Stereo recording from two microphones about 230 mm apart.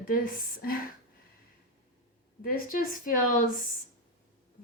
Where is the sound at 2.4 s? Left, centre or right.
Left.